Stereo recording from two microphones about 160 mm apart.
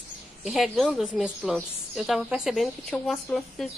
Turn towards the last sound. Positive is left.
turn(degrees=5)  # may be behind; listen again after turning